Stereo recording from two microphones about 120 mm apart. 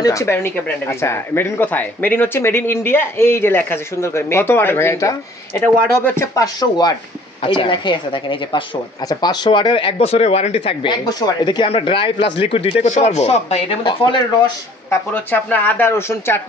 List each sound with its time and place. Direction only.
0.0 s speech: 25° left (ahead or behind)
6.3 s speech: 30° left (ahead or behind)
7.4 s speech: 45° left (ahead or behind)
12.9 s speech: 70° left (ahead or behind)
13.8 s speech: 40° left (ahead or behind)
14.9 s speech: 15° left (ahead or behind)